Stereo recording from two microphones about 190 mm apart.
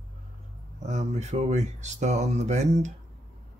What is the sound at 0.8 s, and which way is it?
Speech, 35° right (ahead or behind).